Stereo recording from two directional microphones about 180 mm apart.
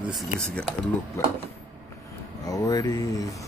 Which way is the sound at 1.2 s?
15° left (ahead or behind).